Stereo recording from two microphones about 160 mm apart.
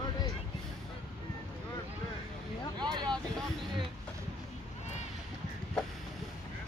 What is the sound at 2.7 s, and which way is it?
Vehicle, 25° right (ahead or behind).